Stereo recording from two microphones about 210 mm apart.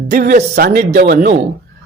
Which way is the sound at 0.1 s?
40° right (ahead or behind).